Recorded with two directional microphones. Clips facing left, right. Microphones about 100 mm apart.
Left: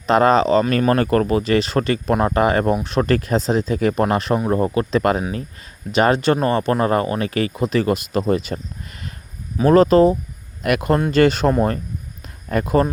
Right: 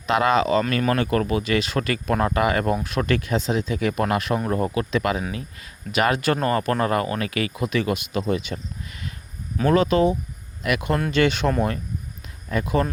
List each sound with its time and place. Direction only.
0.0 s speech: 35° left (ahead or behind)
10.6 s speech: 50° left (ahead or behind)